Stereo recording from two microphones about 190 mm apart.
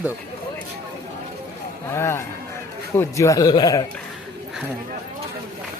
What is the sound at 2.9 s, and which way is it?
Speech, 15° left (ahead or behind).